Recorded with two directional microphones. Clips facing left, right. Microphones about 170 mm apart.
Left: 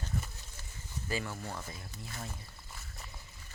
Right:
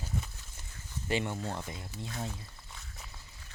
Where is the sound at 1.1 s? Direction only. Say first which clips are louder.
Right 5 dB; 25° right (ahead or behind).